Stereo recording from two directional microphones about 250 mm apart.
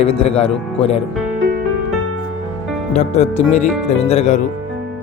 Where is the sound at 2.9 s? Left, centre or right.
Left.